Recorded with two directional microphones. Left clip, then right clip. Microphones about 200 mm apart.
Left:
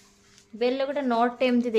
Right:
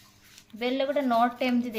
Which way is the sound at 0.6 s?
45° left (ahead or behind).